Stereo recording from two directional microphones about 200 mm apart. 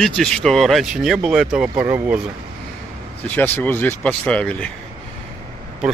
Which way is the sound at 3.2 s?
10° left (ahead or behind).